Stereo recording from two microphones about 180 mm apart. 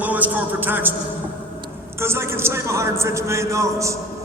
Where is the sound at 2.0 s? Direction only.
15° right (ahead or behind).